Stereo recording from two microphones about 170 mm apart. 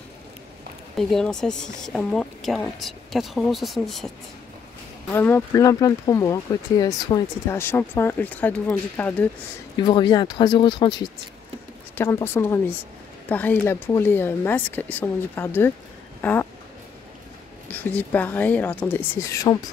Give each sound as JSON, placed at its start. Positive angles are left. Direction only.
{"t": 0.9, "sound": "speech", "side_deg": 5}
{"t": 5.1, "sound": "speech", "side_deg": 15}
{"t": 9.8, "sound": "speech", "side_deg": 25}
{"t": 12.0, "sound": "speech", "side_deg": 15}
{"t": 17.6, "sound": "speech", "side_deg": 10}